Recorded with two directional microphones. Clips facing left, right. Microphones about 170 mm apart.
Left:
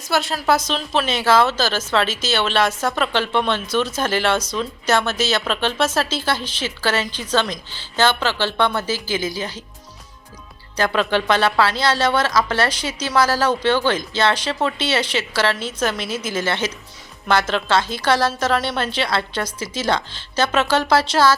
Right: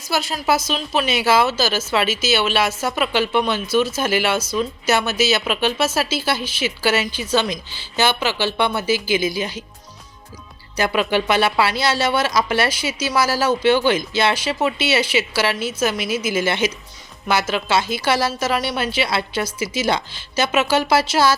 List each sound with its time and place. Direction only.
0.1 s a woman's voice: centre (ahead or behind)
10.8 s a woman's voice: 10° right (ahead or behind)